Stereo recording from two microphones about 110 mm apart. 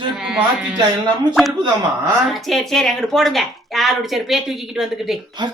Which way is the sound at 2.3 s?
Centre (ahead or behind).